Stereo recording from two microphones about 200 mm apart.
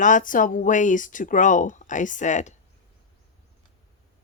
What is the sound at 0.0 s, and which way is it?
Speech, 40° left (ahead or behind).